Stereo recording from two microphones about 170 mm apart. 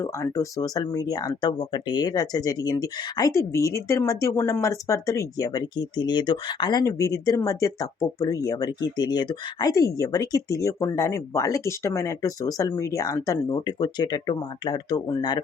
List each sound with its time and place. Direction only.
0.0 s speech: 20° left (ahead or behind)